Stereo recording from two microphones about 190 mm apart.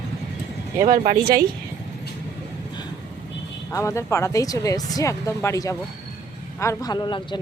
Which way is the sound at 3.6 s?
15° left (ahead or behind).